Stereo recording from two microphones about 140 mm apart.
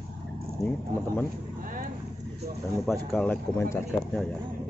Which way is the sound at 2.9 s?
5° left (ahead or behind).